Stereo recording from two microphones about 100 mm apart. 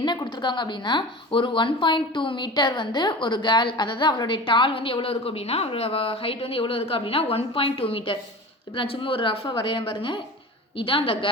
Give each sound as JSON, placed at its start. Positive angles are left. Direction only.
{"t": 0.0, "sound": "a woman's voice", "side_deg": 45}